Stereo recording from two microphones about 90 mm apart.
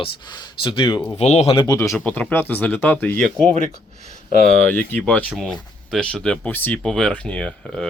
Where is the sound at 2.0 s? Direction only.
15° left (ahead or behind).